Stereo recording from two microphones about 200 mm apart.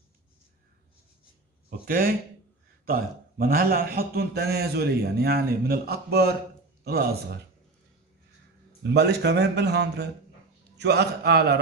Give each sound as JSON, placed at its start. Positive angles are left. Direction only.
{"t": 1.9, "sound": "a man's voice", "side_deg": -45}
{"t": 8.9, "sound": "a man's voice", "side_deg": -55}